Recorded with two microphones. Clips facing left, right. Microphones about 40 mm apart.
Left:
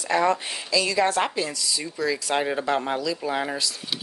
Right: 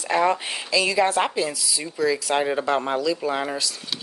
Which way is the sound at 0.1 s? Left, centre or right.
Centre.